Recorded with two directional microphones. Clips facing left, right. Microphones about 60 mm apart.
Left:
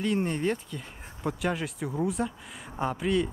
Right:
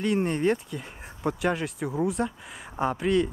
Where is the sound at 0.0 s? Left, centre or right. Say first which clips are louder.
Right 3 dB; centre.